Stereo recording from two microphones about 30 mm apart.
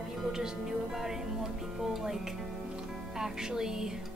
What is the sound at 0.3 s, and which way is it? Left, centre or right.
Speech, centre.